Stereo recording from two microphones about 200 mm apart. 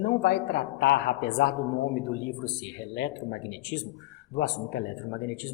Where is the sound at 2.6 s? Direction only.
55° left (ahead or behind).